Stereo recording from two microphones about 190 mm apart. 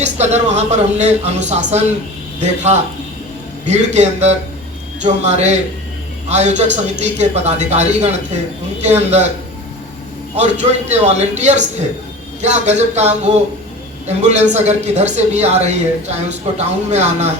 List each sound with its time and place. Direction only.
0.0 s speech: 35° right (ahead or behind)
3.7 s speech: 35° right (ahead or behind)
10.3 s speech: 35° right (ahead or behind)